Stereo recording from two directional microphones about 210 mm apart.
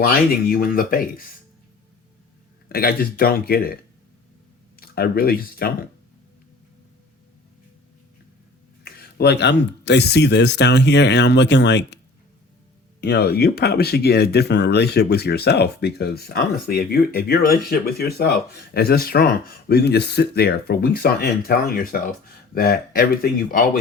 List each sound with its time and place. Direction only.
0.5 s speech: 45° left (ahead or behind)
2.6 s speech: 45° left (ahead or behind)
4.8 s speech: 45° left (ahead or behind)
8.8 s speech: 50° left (ahead or behind)
13.0 s speech: 50° left (ahead or behind)